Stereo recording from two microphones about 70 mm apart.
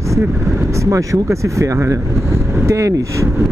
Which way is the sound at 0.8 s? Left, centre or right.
Right.